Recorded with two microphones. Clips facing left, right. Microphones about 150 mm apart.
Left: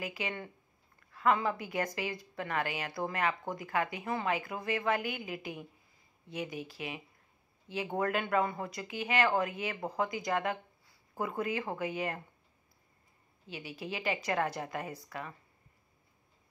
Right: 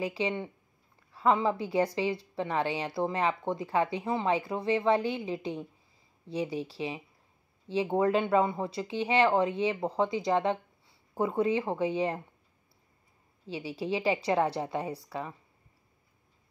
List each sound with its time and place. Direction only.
0.0 s a woman's voice: 30° right (ahead or behind)
13.5 s a woman's voice: 30° right (ahead or behind)